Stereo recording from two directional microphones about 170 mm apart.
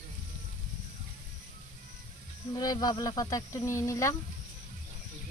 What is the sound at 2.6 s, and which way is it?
Speech, 20° left (ahead or behind).